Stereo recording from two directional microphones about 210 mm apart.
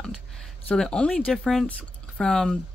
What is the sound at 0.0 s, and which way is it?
A woman's voice, 5° left (ahead or behind).